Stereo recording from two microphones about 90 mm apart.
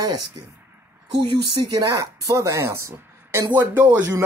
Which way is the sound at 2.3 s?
35° right (ahead or behind).